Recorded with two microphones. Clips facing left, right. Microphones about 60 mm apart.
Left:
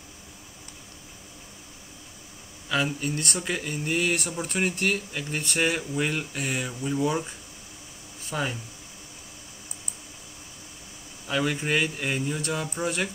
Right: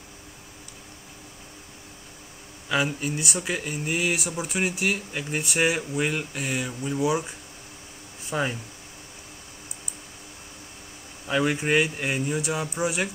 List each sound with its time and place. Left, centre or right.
2.7 s speech: centre
11.2 s speech: centre